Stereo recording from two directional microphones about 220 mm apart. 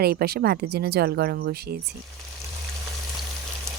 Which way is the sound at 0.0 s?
45° right (ahead or behind).